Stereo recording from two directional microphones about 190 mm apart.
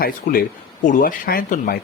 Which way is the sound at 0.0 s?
50° left (ahead or behind).